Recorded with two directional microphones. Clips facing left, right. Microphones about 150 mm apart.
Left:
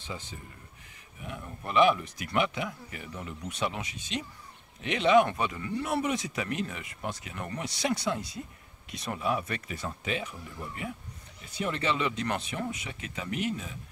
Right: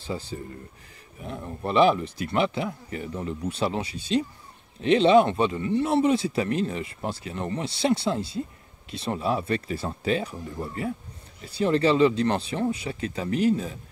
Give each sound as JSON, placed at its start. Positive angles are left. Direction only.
{"t": 0.0, "sound": "speech", "side_deg": -35}